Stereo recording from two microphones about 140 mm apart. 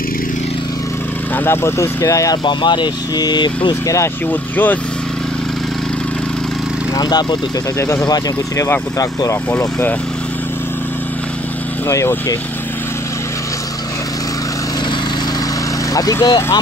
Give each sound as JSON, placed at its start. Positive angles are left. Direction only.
{"t": 1.3, "sound": "speech", "side_deg": 15}
{"t": 7.0, "sound": "speech", "side_deg": 30}
{"t": 7.8, "sound": "speech", "side_deg": 20}
{"t": 9.5, "sound": "speech", "side_deg": 15}
{"t": 11.9, "sound": "speech", "side_deg": 20}
{"t": 15.9, "sound": "speech", "side_deg": 25}